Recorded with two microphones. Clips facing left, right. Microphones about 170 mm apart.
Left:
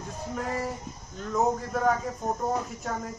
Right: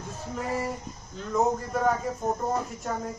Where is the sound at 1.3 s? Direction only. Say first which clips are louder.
Right 1 dB; centre (ahead or behind).